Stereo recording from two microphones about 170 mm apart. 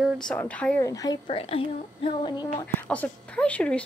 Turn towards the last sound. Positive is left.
turn(degrees=5)  # may be behind; listen again after turning